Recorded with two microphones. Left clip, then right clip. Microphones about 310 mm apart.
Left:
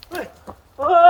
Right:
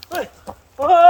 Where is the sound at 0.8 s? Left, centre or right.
Right.